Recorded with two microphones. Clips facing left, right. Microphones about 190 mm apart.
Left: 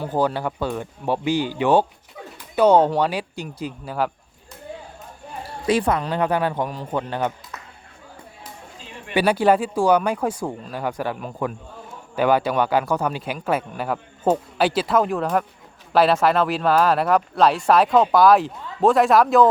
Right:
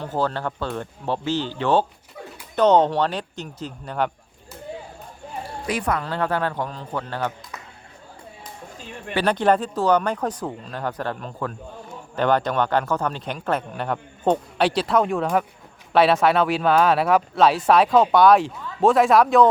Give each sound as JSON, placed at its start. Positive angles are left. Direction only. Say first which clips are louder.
{"t": 0.0, "sound": "speech", "louder": "left 3 dB", "side_deg": 10}
{"t": 5.6, "sound": "speech", "louder": "left 5 dB", "side_deg": 25}
{"t": 9.1, "sound": "speech", "louder": "left 2 dB", "side_deg": 10}